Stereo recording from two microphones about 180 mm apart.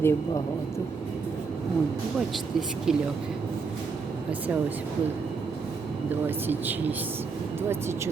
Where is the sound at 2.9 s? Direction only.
5° right (ahead or behind).